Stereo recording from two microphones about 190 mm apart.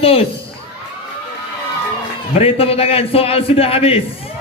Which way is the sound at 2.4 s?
30° left (ahead or behind).